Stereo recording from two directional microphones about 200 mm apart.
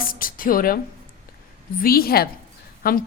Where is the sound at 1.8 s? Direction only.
50° left (ahead or behind).